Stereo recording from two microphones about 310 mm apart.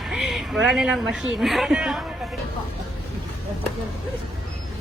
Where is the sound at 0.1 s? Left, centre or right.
Centre.